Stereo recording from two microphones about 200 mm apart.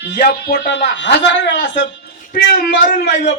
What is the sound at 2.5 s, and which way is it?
Speech, 45° left (ahead or behind).